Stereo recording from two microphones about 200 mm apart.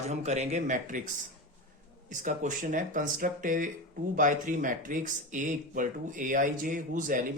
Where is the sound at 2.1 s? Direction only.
40° right (ahead or behind).